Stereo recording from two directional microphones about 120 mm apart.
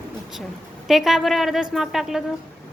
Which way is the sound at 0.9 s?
5° right (ahead or behind).